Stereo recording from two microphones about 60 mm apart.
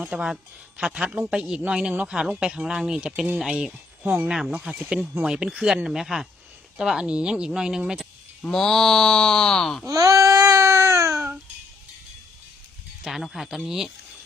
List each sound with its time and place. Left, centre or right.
0.0 s speech: centre
4.0 s speech: right
4.3 s speech: centre
5.1 s speech: centre
8.4 s speech: centre
9.8 s baby cry: right
13.1 s speech: centre